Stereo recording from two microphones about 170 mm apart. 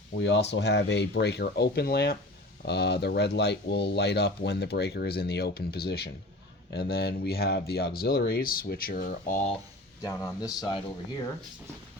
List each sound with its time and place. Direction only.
0.2 s speech: 90° left; by 9.4 s 55° left (ahead or behind)
10.0 s speech: 20° left (ahead or behind)